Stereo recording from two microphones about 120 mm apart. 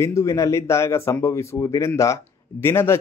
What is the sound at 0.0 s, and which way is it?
Speech, 25° left (ahead or behind).